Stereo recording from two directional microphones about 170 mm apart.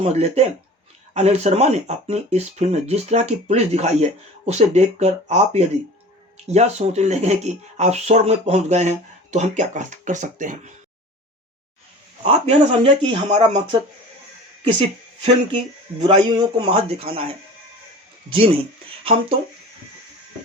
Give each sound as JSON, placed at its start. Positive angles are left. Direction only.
{"t": 0.0, "sound": "speech", "side_deg": -40}
{"t": 12.2, "sound": "speech", "side_deg": -40}
{"t": 14.8, "sound": "a woman's voice", "side_deg": -35}
{"t": 18.3, "sound": "speech", "side_deg": -30}